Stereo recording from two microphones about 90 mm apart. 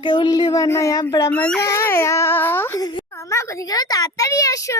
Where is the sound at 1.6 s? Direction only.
30° left (ahead or behind).